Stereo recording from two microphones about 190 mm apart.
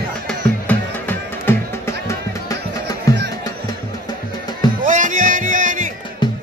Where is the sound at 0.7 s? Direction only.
10° left (ahead or behind).